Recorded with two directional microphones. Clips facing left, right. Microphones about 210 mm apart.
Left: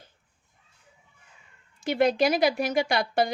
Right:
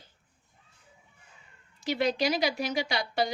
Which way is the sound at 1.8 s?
50° left (ahead or behind).